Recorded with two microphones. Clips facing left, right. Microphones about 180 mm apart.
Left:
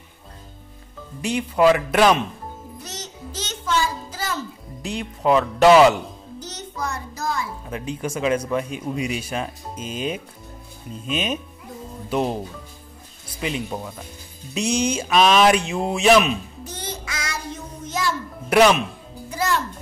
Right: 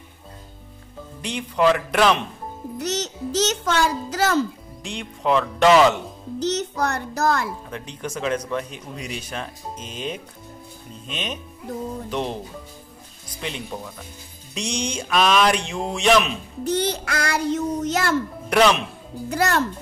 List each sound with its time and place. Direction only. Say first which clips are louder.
1.2 s speech: left 3 dB; 10° left (ahead or behind)
2.8 s a child's voice: right 13 dB; 75° right (ahead or behind)
4.8 s speech: left 3 dB; 5° left (ahead or behind)
6.4 s a child's voice: right 8 dB; 75° right (ahead or behind)
7.7 s speech: left 4 dB; 5° left (ahead or behind)
13.3 s speech: left 4 dB; 5° left (ahead or behind)
16.6 s child singing: right 10 dB; 70° right (ahead or behind)
18.5 s speech: left 2 dB; 10° left (ahead or behind)
19.2 s speech: right 2 dB; 70° right (ahead or behind)